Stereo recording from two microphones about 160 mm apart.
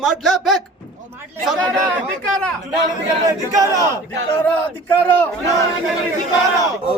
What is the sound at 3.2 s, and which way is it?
Speech, 20° right (ahead or behind).